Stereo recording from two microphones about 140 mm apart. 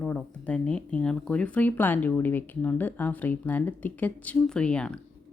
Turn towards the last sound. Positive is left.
turn(degrees=5)  # may be behind; listen again after turning